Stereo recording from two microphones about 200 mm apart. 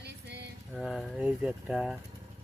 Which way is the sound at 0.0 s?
55° right (ahead or behind).